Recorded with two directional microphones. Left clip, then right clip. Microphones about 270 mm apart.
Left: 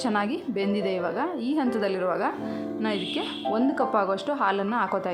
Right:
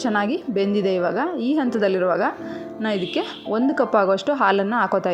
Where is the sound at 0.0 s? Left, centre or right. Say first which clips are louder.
Right 5 dB; centre.